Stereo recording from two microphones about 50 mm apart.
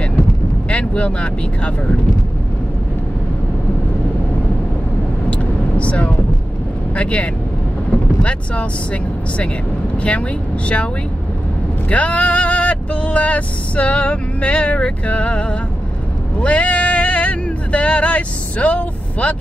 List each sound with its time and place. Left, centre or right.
0.7 s speech: left
5.3 s vehicle: left
7.0 s speech: left
11.9 s speech: left
16.3 s a sound: left